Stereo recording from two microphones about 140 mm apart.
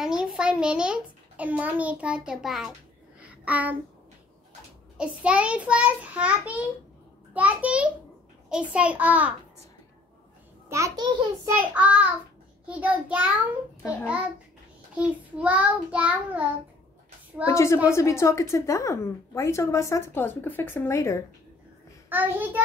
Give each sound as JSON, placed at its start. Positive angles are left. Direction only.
{"t": 0.0, "sound": "a child's voice", "side_deg": -5}
{"t": 3.2, "sound": "a sound", "side_deg": -10}
{"t": 4.9, "sound": "a child's voice", "side_deg": -5}
{"t": 10.7, "sound": "a child's voice", "side_deg": -20}
{"t": 11.7, "sound": "a child's voice", "side_deg": -10}
{"t": 17.5, "sound": "a woman's voice", "side_deg": 20}
{"t": 22.1, "sound": "a child's voice", "side_deg": -15}